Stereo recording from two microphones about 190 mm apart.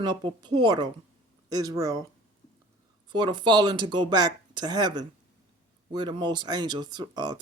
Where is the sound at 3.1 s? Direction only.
25° right (ahead or behind).